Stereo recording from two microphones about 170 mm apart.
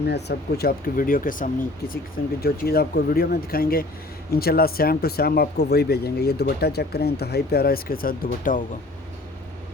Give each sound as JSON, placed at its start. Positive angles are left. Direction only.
{"t": 0.0, "sound": "speech", "side_deg": 75}
{"t": 2.4, "sound": "speech", "side_deg": 65}